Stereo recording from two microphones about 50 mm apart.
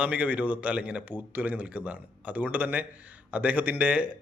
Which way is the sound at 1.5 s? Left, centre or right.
Right.